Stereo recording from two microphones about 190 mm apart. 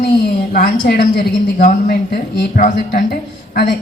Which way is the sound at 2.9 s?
60° left (ahead or behind).